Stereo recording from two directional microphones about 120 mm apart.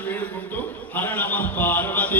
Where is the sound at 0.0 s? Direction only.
15° left (ahead or behind).